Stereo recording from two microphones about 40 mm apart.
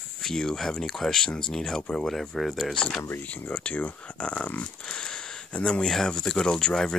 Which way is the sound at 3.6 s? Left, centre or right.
Left.